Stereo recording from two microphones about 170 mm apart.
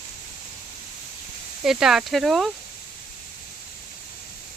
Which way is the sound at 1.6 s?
Centre (ahead or behind).